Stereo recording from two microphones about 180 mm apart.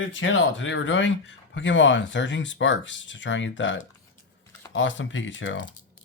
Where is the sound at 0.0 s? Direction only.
90° left.